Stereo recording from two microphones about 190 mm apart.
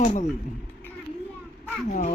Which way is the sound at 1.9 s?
40° left (ahead or behind).